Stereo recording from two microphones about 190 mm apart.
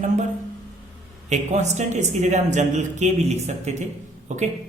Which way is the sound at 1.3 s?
35° right (ahead or behind).